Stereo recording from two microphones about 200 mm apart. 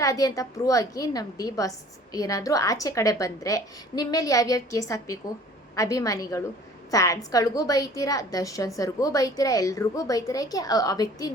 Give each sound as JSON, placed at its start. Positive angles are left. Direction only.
{"t": 0.0, "sound": "a woman's voice", "side_deg": 15}